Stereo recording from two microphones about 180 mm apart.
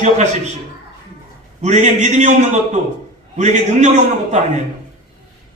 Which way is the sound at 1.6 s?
40° right (ahead or behind).